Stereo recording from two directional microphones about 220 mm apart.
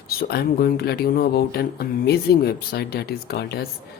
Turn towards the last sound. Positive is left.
turn(degrees=45)  # may be behind; listen again after turning